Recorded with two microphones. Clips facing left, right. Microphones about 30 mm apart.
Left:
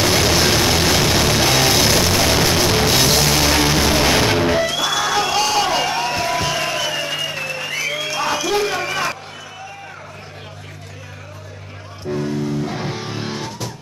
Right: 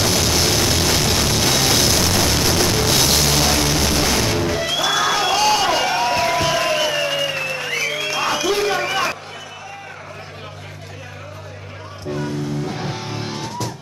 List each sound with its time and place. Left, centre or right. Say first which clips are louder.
0.0 s music: left 3 dB; centre
3.5 s music: left 3 dB; centre
4.6 s music: right 1 dB; centre
12.1 s music: left 2 dB; centre